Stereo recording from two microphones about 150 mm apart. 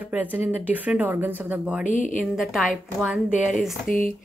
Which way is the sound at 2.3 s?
Centre (ahead or behind).